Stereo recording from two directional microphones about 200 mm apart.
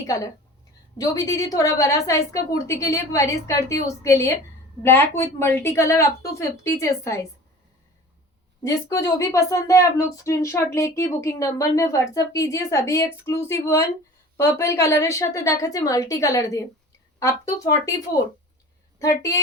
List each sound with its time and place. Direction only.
0.0 s a woman's voice: 15° left (ahead or behind)
8.6 s a woman's voice: 15° left (ahead or behind)
18.9 s a woman's voice: 15° left (ahead or behind)